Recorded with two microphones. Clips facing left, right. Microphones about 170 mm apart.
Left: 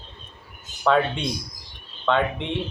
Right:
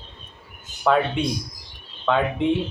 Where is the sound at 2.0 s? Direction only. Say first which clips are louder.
Right 2 dB; 5° right (ahead or behind).